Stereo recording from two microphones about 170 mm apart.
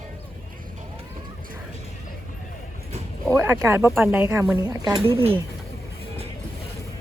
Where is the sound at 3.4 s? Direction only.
15° right (ahead or behind).